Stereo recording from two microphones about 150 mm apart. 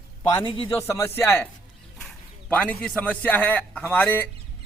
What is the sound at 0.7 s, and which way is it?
A man's voice, 15° left (ahead or behind).